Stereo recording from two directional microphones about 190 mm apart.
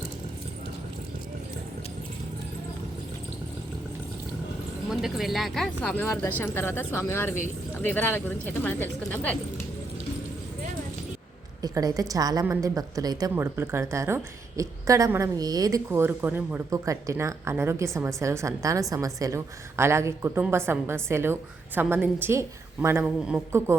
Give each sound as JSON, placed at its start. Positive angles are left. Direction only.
{"t": 4.9, "sound": "speech", "side_deg": -5}
{"t": 11.6, "sound": "a woman's voice", "side_deg": -20}